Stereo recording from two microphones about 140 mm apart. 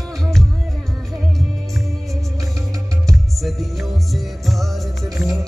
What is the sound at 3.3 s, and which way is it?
Music, centre (ahead or behind).